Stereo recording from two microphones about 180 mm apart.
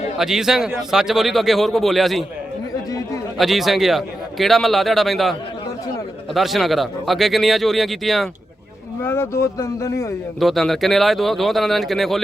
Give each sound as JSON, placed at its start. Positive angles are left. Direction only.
{"t": 0.2, "sound": "a man's voice", "side_deg": -5}
{"t": 3.3, "sound": "a man's voice", "side_deg": 0}
{"t": 9.0, "sound": "speech", "side_deg": 15}
{"t": 10.4, "sound": "a man's voice", "side_deg": 0}